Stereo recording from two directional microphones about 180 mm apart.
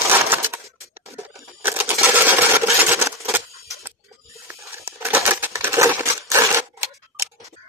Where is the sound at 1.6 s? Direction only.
10° right (ahead or behind).